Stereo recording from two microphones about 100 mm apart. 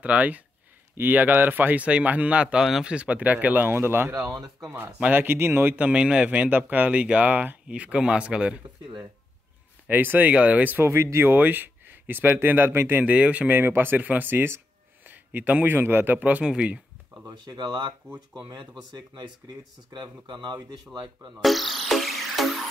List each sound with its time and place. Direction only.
0.0 s a man's voice: 15° right (ahead or behind)
4.3 s speech: 5° right (ahead or behind)
4.6 s a man's voice: 20° right (ahead or behind)
17.3 s speech: 45° right (ahead or behind)
20.4 s speech: 45° right (ahead or behind)
21.4 s music: centre (ahead or behind)